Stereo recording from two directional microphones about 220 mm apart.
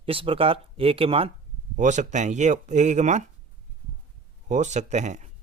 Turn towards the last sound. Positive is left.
turn(degrees=-30)  # may be behind; listen again after turning